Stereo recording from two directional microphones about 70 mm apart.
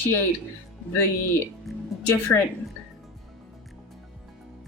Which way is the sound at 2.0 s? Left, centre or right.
Left.